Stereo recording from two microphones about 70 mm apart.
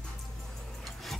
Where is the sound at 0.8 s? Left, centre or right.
Centre.